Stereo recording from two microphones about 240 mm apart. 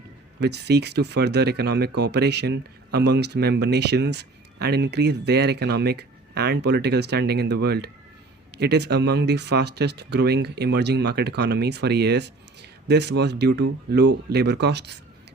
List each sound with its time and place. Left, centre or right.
0.3 s speech: right